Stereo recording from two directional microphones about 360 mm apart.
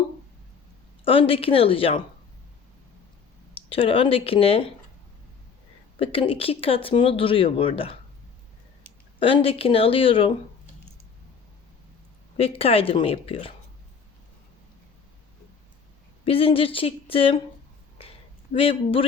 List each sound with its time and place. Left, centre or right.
1.0 s speech: centre
3.5 s speech: centre
6.0 s speech: centre
9.1 s speech: centre
12.4 s speech: centre
16.2 s speech: centre
18.5 s speech: centre